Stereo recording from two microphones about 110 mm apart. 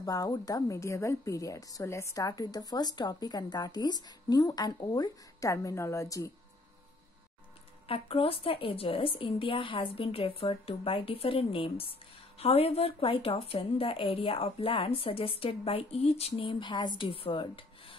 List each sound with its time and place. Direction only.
0.0 s a woman's voice: 30° left (ahead or behind)
7.9 s a woman's voice: 60° left (ahead or behind)
17.1 s rub: 55° left (ahead or behind)